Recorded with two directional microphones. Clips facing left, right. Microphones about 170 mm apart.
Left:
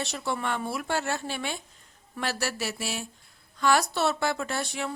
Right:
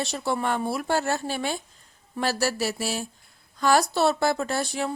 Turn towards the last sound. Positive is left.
turn(degrees=-35)  # may be behind; listen again after turning